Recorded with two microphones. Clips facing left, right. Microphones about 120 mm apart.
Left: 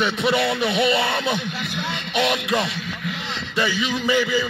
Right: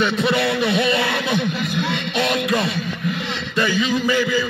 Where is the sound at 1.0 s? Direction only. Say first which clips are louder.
Right 2 dB; 30° left (ahead or behind).